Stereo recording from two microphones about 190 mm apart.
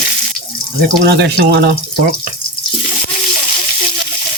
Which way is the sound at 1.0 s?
60° right (ahead or behind).